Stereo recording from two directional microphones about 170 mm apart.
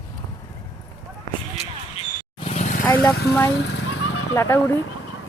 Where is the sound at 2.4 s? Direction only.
40° left (ahead or behind).